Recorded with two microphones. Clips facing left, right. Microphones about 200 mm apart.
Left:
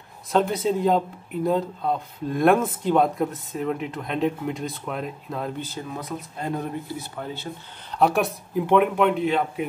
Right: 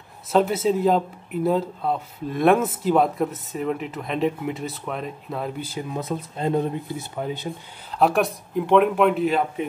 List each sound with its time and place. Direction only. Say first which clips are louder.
0.3 s speech: right 2 dB; 5° right (ahead or behind)
5.9 s speech: right 4 dB; 25° right (ahead or behind)
7.9 s speech: right 1 dB; centre (ahead or behind)